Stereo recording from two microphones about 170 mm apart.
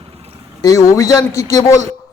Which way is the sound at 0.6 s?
20° left (ahead or behind).